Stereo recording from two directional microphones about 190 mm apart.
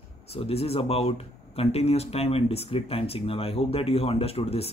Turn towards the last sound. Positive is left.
turn(degrees=30)  # may be behind; listen again after turning